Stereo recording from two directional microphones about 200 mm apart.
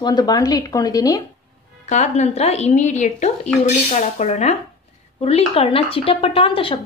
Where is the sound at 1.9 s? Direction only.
35° left (ahead or behind).